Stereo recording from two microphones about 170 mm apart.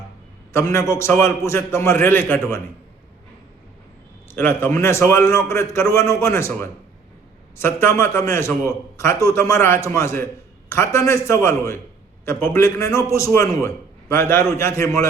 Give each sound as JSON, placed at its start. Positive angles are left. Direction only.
{"t": 0.5, "sound": "a man's voice", "side_deg": 15}
{"t": 4.4, "sound": "a man's voice", "side_deg": 15}